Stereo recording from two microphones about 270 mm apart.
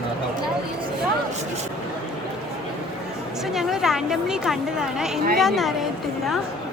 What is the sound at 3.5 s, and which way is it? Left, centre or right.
A woman's voice, centre.